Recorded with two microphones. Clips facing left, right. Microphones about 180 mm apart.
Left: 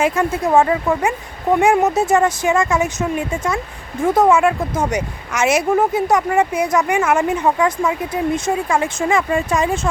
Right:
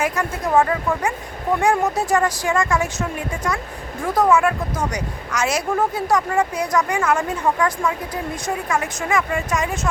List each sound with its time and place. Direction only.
0.0 s speech: 25° left (ahead or behind)